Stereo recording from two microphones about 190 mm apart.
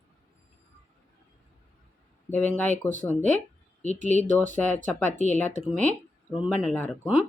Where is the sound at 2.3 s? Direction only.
10° left (ahead or behind).